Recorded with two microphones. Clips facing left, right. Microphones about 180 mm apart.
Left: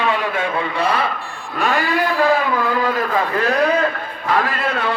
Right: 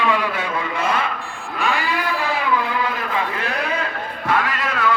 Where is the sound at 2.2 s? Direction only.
45° left (ahead or behind).